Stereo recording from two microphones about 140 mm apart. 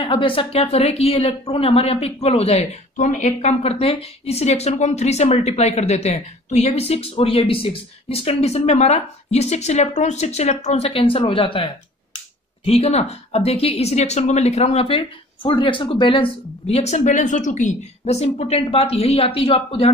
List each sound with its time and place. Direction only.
0.0 s a woman's voice: 40° left (ahead or behind)